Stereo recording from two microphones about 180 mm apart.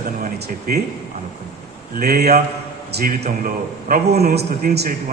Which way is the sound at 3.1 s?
45° right (ahead or behind).